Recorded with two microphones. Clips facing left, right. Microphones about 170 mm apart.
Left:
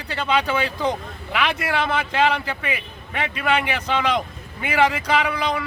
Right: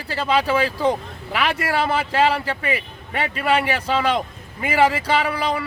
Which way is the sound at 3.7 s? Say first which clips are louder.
Right 2 dB; 35° right (ahead or behind).